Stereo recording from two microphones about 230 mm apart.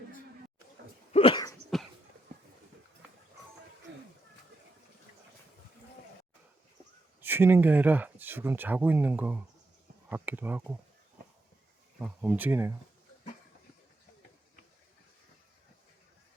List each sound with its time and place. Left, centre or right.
1.1 s cough: left
7.2 s speech: centre
11.9 s speech: centre